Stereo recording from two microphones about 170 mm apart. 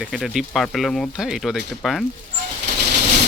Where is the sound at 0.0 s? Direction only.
Centre (ahead or behind).